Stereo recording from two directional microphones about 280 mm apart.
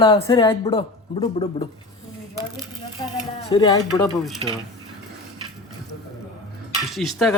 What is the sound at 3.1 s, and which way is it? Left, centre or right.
Speech, centre.